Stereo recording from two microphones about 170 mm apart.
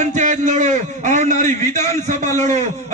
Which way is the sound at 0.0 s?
45° right (ahead or behind).